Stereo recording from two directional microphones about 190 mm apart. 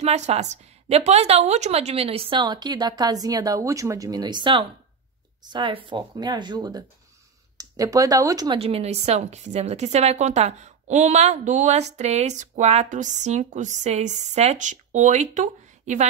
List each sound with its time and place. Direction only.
0.0 s a woman's voice: 35° right (ahead or behind); by 8.5 s 20° right (ahead or behind)
8.5 s a woman's voice: 30° right (ahead or behind)